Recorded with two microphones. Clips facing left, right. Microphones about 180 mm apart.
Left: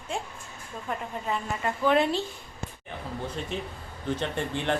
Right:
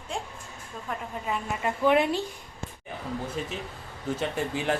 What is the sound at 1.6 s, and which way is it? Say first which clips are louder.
Speech: right 1 dB; 15° right (ahead or behind).